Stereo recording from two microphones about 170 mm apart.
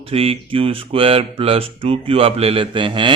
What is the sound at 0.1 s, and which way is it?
Mantra, 35° right (ahead or behind).